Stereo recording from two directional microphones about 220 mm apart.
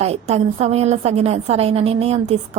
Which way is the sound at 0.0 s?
30° right (ahead or behind).